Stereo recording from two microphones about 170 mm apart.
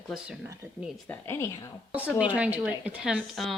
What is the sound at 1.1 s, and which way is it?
Speech, 15° left (ahead or behind).